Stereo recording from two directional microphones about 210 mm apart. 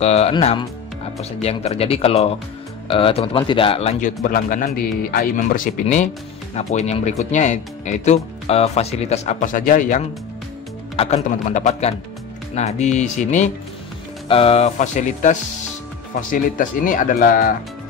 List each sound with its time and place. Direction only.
0.0 s speech: 30° left (ahead or behind)